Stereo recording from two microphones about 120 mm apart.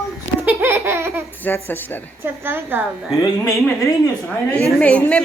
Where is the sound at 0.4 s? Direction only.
20° right (ahead or behind).